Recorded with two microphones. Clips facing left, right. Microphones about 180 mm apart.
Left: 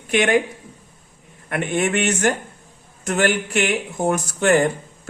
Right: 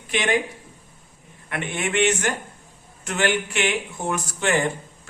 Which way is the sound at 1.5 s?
45° left (ahead or behind).